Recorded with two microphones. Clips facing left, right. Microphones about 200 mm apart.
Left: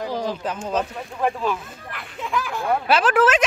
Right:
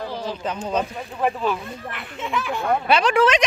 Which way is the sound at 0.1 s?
45° left (ahead or behind).